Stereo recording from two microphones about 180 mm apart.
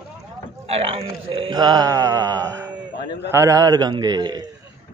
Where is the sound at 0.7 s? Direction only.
30° right (ahead or behind).